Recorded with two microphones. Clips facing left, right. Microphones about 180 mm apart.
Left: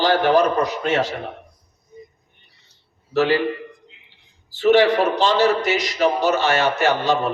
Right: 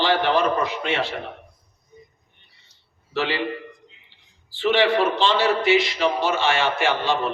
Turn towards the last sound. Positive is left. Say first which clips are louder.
# left 3 dB
turn(degrees=40)  # may be behind; listen again after turning